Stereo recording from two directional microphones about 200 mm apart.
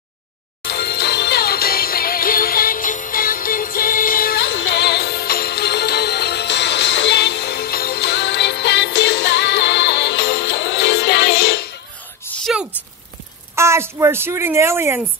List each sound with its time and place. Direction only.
0.7 s music: 55° left (ahead or behind)
12.4 s a sound: centre (ahead or behind)
13.6 s speech: 15° right (ahead or behind)